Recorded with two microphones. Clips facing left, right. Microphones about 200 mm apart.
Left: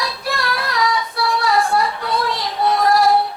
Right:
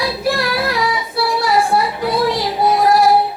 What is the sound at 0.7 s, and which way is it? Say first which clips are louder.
Child singing: right 1 dB; 10° right (ahead or behind).